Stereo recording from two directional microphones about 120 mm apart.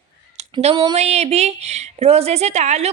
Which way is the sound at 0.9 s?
60° right (ahead or behind).